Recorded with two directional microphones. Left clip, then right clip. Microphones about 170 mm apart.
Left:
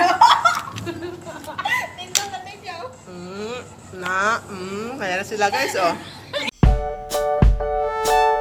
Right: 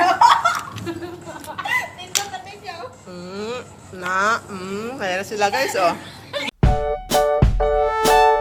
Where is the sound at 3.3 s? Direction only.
50° right (ahead or behind).